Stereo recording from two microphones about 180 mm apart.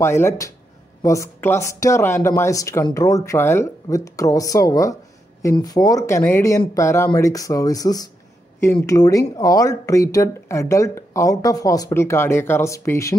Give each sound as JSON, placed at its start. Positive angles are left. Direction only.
{"t": 0.0, "sound": "speech", "side_deg": 15}